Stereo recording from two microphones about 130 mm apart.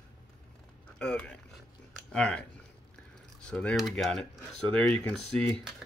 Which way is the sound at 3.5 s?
5° left (ahead or behind).